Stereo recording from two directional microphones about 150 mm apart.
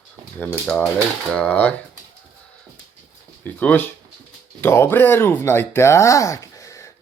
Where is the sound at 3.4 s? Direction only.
10° left (ahead or behind).